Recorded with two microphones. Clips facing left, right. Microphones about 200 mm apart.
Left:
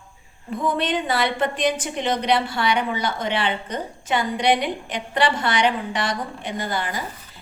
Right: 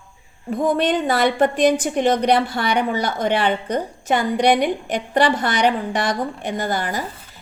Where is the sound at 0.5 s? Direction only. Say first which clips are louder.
Right 4 dB; 45° right (ahead or behind).